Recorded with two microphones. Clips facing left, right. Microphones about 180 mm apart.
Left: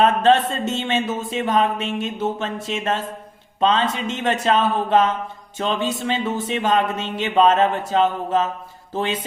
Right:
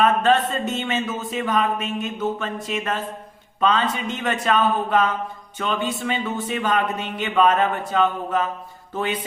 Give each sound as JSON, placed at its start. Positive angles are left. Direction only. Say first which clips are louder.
{"t": 0.0, "sound": "speech", "louder": "left 2 dB", "side_deg": 30}